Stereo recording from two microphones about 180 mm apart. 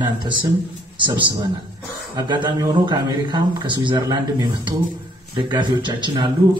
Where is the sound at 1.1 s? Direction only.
25° right (ahead or behind).